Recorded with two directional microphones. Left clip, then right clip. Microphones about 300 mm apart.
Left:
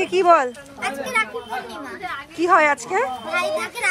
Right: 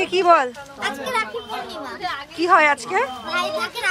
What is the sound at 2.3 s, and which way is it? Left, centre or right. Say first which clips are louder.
Speech: right 1 dB; centre.